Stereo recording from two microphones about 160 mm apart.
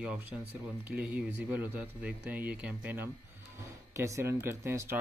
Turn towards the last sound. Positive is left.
turn(degrees=-15)  # may be behind; listen again after turning